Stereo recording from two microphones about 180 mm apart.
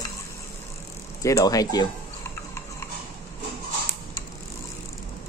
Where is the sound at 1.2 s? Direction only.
20° left (ahead or behind).